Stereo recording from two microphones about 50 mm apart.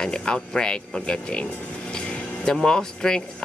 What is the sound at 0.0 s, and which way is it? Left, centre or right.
Speech, centre.